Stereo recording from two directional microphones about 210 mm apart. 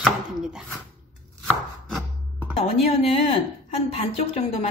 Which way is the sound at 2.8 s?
30° left (ahead or behind).